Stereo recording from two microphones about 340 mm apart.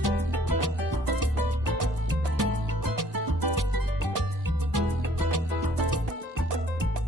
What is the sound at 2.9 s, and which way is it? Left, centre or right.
Music, right.